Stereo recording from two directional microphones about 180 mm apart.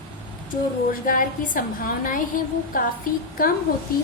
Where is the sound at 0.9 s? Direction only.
50° left (ahead or behind).